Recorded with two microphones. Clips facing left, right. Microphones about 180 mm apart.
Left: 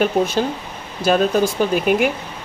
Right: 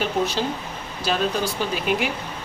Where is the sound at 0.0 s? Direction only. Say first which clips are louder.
Left 6 dB; 50° left (ahead or behind).